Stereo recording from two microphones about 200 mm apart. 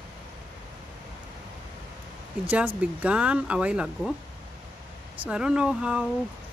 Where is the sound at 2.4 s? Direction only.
5° right (ahead or behind).